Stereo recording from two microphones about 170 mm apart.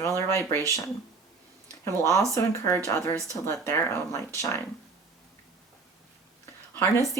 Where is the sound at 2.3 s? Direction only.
15° left (ahead or behind).